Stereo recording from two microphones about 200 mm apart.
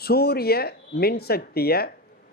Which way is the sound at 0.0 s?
50° left (ahead or behind).